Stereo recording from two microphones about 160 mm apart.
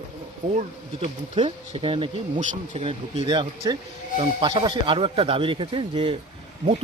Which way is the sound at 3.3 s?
25° right (ahead or behind).